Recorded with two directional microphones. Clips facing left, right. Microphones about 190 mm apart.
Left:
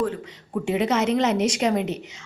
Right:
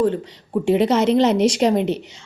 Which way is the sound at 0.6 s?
35° right (ahead or behind).